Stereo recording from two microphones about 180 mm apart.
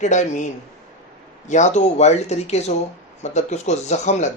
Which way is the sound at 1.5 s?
40° left (ahead or behind).